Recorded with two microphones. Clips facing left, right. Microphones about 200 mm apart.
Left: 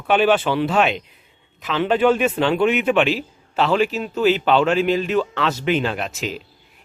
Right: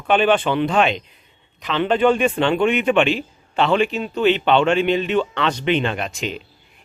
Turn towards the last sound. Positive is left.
turn(degrees=5)  # may be behind; listen again after turning